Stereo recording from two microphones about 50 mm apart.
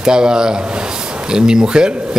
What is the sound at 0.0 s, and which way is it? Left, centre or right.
Speech, centre.